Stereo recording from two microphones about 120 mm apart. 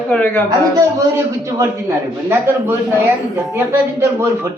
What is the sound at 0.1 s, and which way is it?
Speech, 15° left (ahead or behind).